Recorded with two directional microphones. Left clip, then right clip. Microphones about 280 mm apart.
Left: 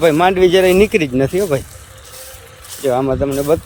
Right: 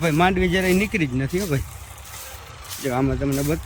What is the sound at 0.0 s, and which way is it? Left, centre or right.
Speech, centre.